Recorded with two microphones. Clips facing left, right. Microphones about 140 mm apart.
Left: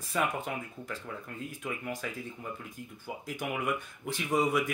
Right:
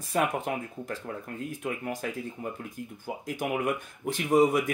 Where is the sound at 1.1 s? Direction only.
40° right (ahead or behind).